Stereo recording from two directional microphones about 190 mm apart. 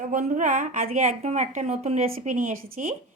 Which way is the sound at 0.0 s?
40° right (ahead or behind).